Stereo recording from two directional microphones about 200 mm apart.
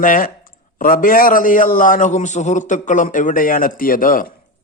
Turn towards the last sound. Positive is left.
turn(degrees=45)  # may be behind; listen again after turning